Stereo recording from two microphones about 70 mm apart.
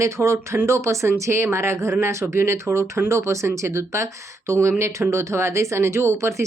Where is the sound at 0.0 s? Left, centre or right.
Right.